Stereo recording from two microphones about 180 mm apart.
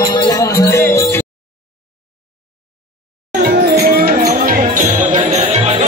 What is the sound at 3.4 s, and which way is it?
Music, 50° right (ahead or behind).